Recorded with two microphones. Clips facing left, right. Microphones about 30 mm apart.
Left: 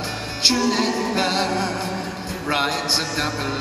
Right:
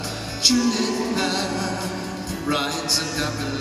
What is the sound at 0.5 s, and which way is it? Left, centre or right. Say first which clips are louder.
A capella: left 1 dB; left.